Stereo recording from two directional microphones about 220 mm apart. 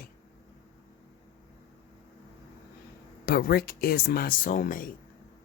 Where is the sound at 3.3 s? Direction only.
45° left (ahead or behind).